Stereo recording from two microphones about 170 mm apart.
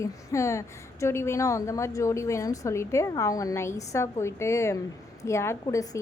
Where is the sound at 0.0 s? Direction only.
20° left (ahead or behind).